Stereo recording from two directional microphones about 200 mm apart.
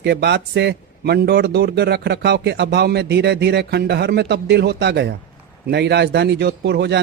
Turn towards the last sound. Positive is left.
turn(degrees=-55)  # may be behind; listen again after turning